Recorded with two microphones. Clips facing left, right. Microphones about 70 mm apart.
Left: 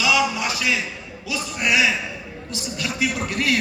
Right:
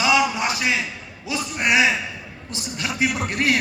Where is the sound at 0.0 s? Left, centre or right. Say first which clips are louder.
Right 1 dB; right.